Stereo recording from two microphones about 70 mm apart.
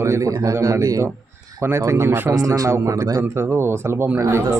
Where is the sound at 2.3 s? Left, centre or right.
Right.